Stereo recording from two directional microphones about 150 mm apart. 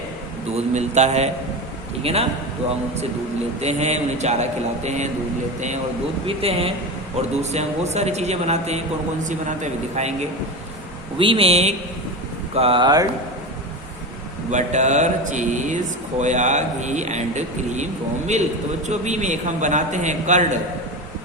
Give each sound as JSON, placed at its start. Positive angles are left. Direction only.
{"t": 0.5, "sound": "speech", "side_deg": -50}
{"t": 3.6, "sound": "speech", "side_deg": -45}
{"t": 6.2, "sound": "speech", "side_deg": -40}
{"t": 9.9, "sound": "speech", "side_deg": -45}
{"t": 11.2, "sound": "speech", "side_deg": -35}
{"t": 14.5, "sound": "speech", "side_deg": -50}
{"t": 18.9, "sound": "speech", "side_deg": -50}